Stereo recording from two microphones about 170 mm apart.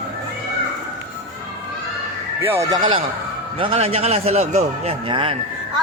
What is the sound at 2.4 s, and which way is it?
Speech, 15° right (ahead or behind).